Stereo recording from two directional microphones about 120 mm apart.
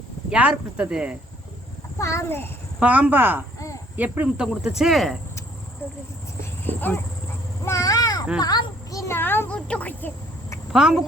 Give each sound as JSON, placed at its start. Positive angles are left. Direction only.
{"t": 0.3, "sound": "speech", "side_deg": -10}
{"t": 2.0, "sound": "a child's voice", "side_deg": 25}
{"t": 2.8, "sound": "speech", "side_deg": -15}
{"t": 5.8, "sound": "a child's voice", "side_deg": 20}
{"t": 7.6, "sound": "a sound", "side_deg": 25}
{"t": 8.4, "sound": "speech", "side_deg": 35}
{"t": 10.7, "sound": "speech", "side_deg": -5}